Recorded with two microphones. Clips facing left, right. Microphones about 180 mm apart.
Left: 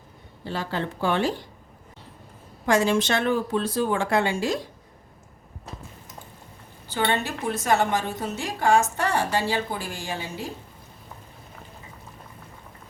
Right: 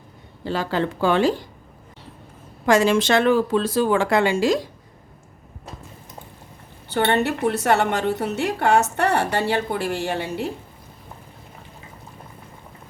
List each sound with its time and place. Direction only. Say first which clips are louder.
0.4 s speech: right 6 dB; 90° right
2.6 s speech: right 4 dB; 90° right
6.9 s a woman's voice: right 6 dB; 65° right (ahead or behind)